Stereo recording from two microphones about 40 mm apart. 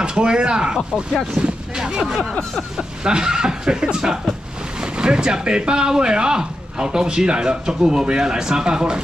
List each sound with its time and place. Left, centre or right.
0.0 s speech: right
1.8 s speech: centre